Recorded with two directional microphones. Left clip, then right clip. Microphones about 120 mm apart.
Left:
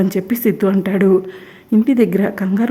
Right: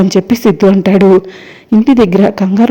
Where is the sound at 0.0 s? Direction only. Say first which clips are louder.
Right 8 dB; 30° right (ahead or behind).